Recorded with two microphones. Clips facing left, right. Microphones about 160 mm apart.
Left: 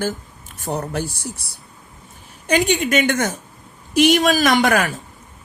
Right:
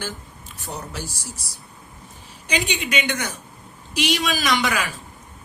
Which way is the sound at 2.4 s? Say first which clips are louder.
Left 8 dB; 50° left (ahead or behind).